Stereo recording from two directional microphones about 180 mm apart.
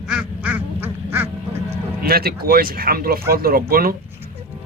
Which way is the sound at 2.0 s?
55° right (ahead or behind).